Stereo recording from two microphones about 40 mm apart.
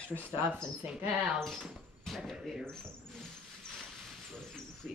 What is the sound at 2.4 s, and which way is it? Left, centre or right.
Speech, centre.